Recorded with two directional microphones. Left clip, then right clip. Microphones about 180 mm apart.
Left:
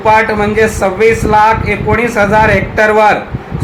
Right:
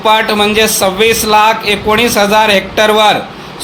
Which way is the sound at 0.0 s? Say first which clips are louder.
Even; 50° right (ahead or behind).